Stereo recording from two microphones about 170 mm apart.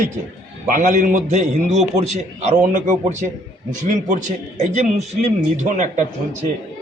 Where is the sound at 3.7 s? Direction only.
50° right (ahead or behind).